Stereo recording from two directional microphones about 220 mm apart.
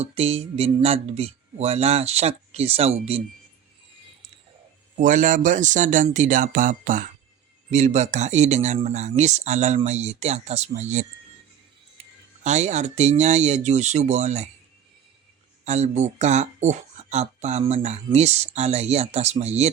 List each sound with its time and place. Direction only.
0.0 s speech: 30° right (ahead or behind)
4.9 s speech: 35° right (ahead or behind)
12.4 s speech: 30° right (ahead or behind)
15.6 s speech: 30° right (ahead or behind)